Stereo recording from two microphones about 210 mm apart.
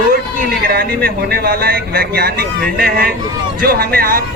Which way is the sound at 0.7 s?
45° right (ahead or behind).